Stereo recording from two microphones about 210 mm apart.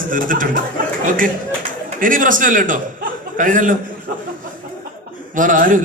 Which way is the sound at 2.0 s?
40° right (ahead or behind).